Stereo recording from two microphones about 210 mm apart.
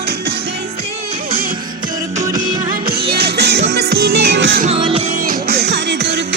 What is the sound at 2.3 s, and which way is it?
Music, 40° right (ahead or behind).